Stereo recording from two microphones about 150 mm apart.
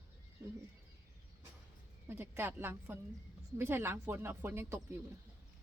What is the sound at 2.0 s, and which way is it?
Speech, 15° right (ahead or behind).